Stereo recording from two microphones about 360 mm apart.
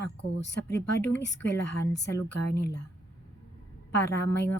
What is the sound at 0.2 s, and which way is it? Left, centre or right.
Speech, left.